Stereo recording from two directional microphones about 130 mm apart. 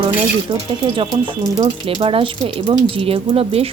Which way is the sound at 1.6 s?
45° right (ahead or behind).